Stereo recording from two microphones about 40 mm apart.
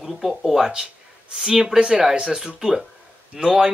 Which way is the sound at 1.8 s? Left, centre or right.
Right.